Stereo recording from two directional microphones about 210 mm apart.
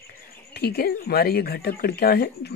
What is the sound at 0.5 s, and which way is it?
A woman's voice, 50° left (ahead or behind).